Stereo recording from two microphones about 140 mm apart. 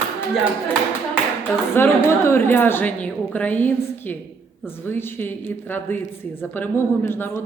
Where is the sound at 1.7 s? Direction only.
15° left (ahead or behind).